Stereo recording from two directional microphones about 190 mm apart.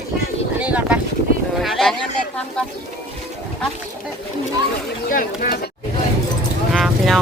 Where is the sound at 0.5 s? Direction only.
5° right (ahead or behind).